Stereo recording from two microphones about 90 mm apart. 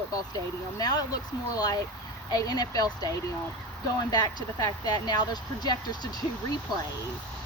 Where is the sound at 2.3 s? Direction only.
45° left (ahead or behind).